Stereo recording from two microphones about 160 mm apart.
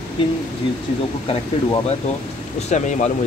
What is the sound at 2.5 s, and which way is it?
Speech, 45° left (ahead or behind).